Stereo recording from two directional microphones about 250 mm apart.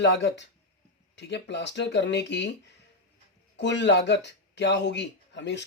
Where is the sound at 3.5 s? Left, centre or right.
Left.